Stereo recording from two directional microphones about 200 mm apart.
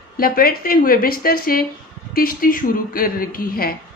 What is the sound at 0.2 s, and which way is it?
Speech, 45° left (ahead or behind).